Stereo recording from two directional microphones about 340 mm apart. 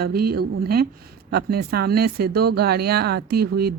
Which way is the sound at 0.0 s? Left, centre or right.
Right.